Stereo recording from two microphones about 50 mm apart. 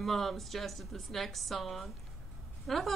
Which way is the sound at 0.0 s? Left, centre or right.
Centre.